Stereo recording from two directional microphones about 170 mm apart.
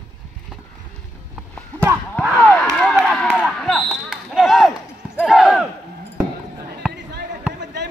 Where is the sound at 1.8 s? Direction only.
10° right (ahead or behind).